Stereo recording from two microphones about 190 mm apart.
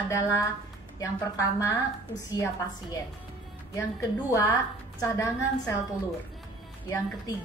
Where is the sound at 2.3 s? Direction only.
20° left (ahead or behind).